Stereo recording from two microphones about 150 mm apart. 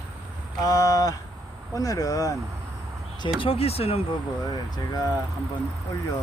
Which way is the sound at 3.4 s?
40° left (ahead or behind).